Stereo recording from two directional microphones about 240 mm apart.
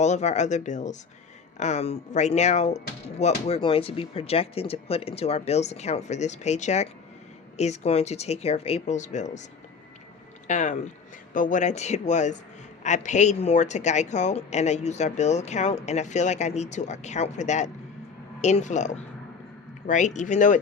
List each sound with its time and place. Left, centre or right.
0.0 s speech: left